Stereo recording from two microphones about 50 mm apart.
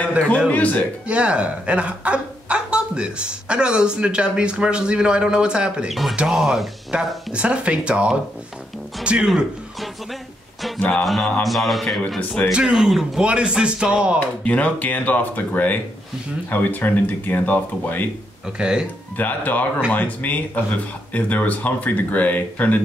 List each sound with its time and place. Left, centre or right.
0.5 s speech: left
1.0 s a woman's voice: right
5.9 s mantra: centre
6.9 s a woman's voice: right
10.8 s speech: left
11.4 s mantra: centre
12.4 s speech: left
12.7 s mantra: centre
13.2 s a woman's voice: centre
14.2 s speech: left
18.6 s speech: centre
19.1 s speech: left